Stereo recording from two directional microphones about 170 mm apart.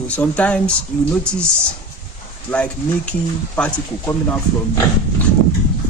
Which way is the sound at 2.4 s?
5° left (ahead or behind).